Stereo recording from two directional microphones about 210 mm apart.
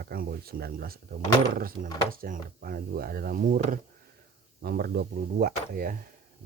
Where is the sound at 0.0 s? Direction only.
45° right (ahead or behind).